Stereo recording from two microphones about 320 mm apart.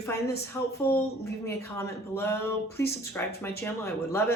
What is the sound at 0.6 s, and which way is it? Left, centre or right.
Speech, centre.